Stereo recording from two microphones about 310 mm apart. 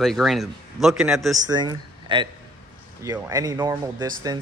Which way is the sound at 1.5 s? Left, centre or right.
Centre.